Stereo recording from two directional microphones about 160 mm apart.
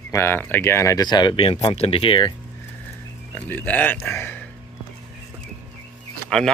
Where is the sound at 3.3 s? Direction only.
10° left (ahead or behind).